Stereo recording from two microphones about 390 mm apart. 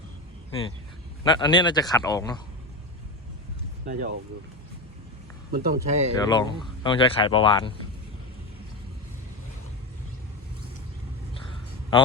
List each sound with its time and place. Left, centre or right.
1.2 s speech: centre
3.8 s speech: centre
5.5 s speech: right
6.2 s speech: centre